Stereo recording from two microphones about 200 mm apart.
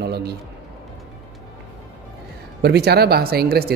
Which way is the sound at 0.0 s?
55° right (ahead or behind).